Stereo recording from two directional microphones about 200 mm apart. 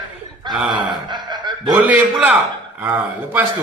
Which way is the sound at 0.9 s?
20° right (ahead or behind).